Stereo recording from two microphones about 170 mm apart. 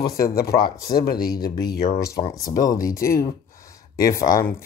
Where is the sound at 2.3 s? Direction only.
20° left (ahead or behind).